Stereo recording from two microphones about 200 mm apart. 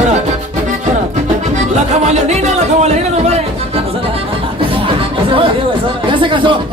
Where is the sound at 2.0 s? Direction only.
35° right (ahead or behind).